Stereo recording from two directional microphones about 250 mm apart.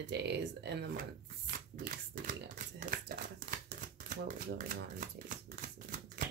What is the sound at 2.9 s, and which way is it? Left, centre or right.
Crumpling, right.